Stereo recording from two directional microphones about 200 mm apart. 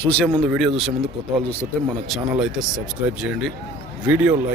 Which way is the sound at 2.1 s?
Centre (ahead or behind).